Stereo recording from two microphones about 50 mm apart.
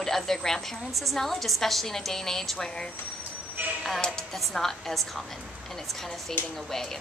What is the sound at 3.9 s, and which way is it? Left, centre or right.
A woman's voice, centre.